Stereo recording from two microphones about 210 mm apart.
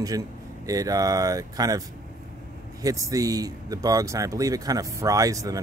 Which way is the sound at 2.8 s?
15° right (ahead or behind).